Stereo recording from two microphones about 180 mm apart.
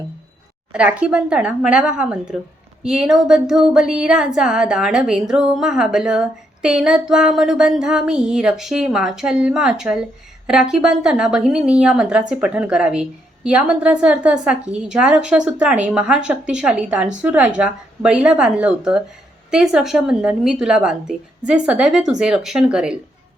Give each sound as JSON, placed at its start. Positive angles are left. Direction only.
{"t": 0.7, "sound": "speech", "side_deg": -5}